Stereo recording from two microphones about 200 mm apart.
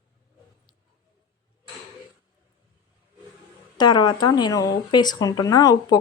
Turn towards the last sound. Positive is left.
turn(degrees=20)  # may be behind; listen again after turning